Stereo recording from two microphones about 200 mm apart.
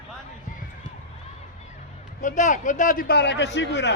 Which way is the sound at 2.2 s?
40° left (ahead or behind).